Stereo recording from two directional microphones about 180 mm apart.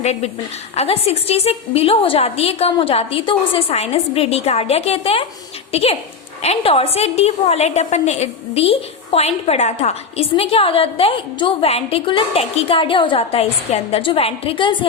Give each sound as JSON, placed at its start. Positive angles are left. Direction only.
{"t": 0.0, "sound": "a woman's voice", "side_deg": 35}